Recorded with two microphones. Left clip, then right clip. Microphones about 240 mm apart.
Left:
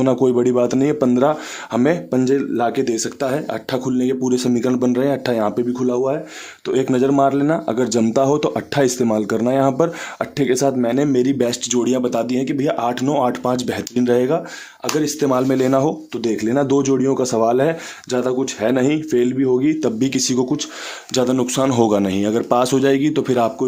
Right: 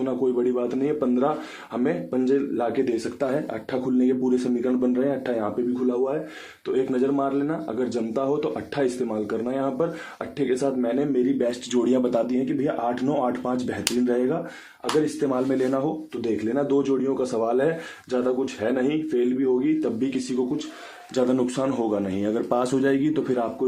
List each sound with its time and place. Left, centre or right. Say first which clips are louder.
0.0 s speech: left 8 dB; left
6.7 s speech: left 6 dB; left
11.7 s speech: left 3 dB; left
12.5 s speech: left 6 dB; left
21.1 s speech: left 5 dB; left